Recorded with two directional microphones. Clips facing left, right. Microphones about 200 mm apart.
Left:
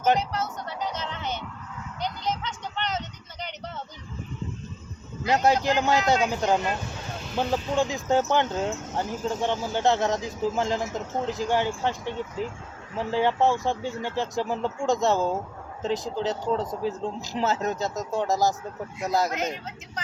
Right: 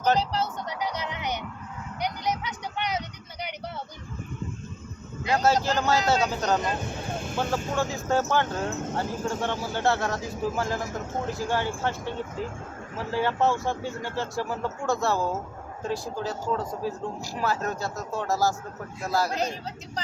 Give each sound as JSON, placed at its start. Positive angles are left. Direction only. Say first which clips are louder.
{"t": 0.2, "sound": "speech", "louder": "right 2 dB", "side_deg": -35}
{"t": 0.7, "sound": "music", "louder": "right 1 dB", "side_deg": -10}
{"t": 2.0, "sound": "a sound", "louder": "right 1 dB", "side_deg": -15}
{"t": 5.2, "sound": "speech", "louder": "left 1 dB", "side_deg": 20}
{"t": 7.1, "sound": "vehicle", "louder": "right 4 dB", "side_deg": -50}
{"t": 7.8, "sound": "speech", "louder": "left 3 dB", "side_deg": 15}